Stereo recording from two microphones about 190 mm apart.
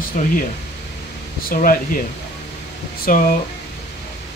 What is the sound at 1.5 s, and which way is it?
Speech, 45° left (ahead or behind).